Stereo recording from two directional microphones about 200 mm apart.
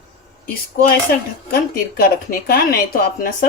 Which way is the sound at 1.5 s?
50° left (ahead or behind).